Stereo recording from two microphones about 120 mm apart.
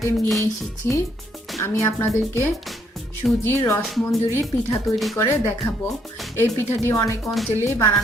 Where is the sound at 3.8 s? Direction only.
Centre (ahead or behind).